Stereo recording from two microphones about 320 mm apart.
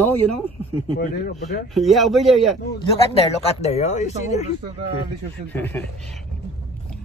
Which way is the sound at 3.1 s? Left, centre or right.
Centre.